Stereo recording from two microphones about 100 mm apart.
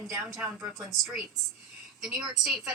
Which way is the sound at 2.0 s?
5° right (ahead or behind).